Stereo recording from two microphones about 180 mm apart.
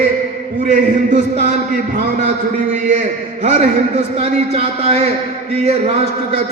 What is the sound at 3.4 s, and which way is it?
A man's voice, 35° right (ahead or behind).